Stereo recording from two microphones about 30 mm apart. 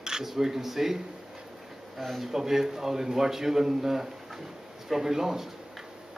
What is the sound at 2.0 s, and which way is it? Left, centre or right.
Speech, centre.